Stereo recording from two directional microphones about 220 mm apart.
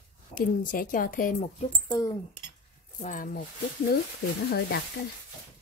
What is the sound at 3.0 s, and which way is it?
Speech, 40° left (ahead or behind).